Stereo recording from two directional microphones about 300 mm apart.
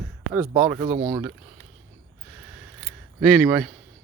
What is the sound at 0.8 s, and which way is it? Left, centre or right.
Speech, centre.